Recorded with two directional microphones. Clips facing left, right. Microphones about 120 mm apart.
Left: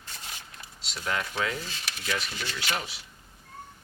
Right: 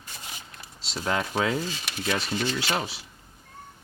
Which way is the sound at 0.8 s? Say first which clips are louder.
Right 4 dB; 30° right (ahead or behind).